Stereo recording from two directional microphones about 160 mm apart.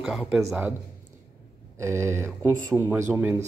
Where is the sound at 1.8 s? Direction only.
15° right (ahead or behind).